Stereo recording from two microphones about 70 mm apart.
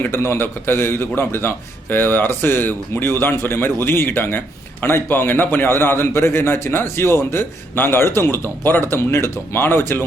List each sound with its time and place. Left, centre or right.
0.0 s a man's voice: left